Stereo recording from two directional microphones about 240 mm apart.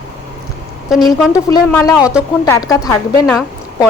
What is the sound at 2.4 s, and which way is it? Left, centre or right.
Speech, centre.